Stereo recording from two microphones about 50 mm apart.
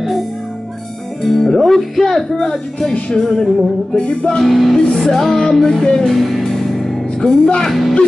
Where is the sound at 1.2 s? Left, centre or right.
Centre.